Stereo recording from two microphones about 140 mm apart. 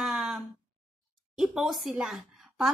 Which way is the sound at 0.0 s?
5° right (ahead or behind).